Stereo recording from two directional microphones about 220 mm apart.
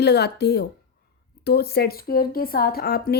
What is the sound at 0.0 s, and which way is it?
A woman's voice, 50° left (ahead or behind).